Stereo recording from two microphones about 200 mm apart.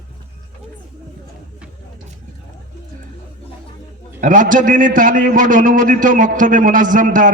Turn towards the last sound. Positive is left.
turn(degrees=-40)  # may be behind; listen again after turning